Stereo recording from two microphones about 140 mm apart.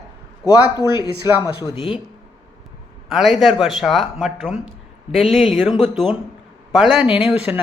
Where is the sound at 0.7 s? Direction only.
30° left (ahead or behind).